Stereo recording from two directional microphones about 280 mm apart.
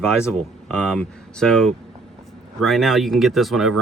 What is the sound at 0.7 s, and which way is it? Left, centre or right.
Speech, centre.